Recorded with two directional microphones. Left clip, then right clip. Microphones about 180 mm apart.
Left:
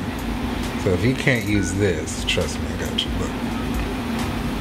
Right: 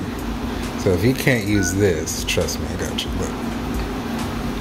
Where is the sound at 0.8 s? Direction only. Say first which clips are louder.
Right 3 dB; 20° right (ahead or behind).